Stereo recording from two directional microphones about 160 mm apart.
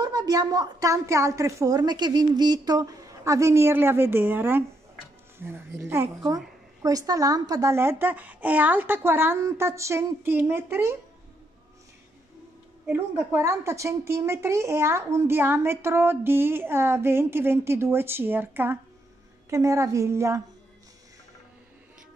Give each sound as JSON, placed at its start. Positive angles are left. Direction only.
{"t": 0.0, "sound": "a woman's voice", "side_deg": -25}
{"t": 12.8, "sound": "a woman's voice", "side_deg": -15}